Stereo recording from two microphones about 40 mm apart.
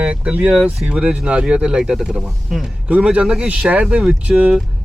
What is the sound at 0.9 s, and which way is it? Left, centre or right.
Speech, right.